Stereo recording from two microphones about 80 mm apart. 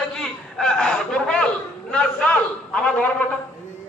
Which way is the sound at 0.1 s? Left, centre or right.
Centre.